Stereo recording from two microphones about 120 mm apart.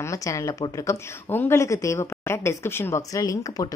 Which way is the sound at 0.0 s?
25° left (ahead or behind).